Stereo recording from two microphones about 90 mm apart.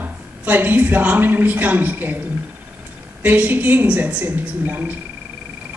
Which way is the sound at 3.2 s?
20° right (ahead or behind).